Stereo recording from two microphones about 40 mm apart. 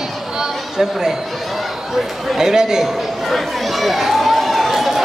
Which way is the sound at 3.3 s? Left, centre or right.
Centre.